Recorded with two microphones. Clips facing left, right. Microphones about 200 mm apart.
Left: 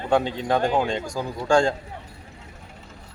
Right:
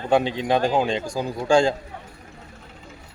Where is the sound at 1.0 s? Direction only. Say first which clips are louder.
Right 2 dB; 30° right (ahead or behind).